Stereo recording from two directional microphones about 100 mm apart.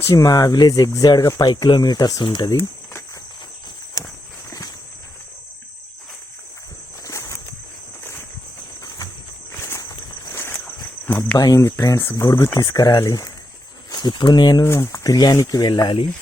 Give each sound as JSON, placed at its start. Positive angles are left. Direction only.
{"t": 0.0, "sound": "speech", "side_deg": 35}
{"t": 7.0, "sound": "walk", "side_deg": 30}
{"t": 9.5, "sound": "a sound", "side_deg": 25}
{"t": 10.3, "sound": "walk", "side_deg": 20}
{"t": 11.3, "sound": "speech", "side_deg": 40}
{"t": 11.6, "sound": "speech", "side_deg": 30}
{"t": 13.9, "sound": "speech", "side_deg": 50}
{"t": 14.6, "sound": "speech", "side_deg": 30}